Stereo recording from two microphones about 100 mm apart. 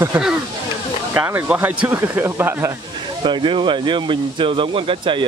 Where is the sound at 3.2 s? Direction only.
55° right (ahead or behind).